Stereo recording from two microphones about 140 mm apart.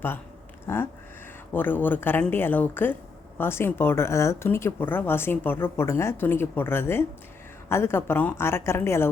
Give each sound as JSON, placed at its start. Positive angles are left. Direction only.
{"t": 0.7, "sound": "speech", "side_deg": 15}